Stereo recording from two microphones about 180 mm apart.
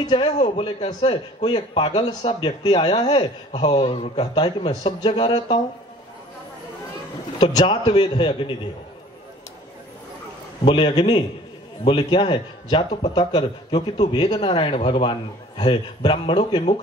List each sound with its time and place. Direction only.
0.0 s speech: 25° left (ahead or behind)
7.3 s speech: 30° left (ahead or behind)
10.6 s speech: 30° left (ahead or behind)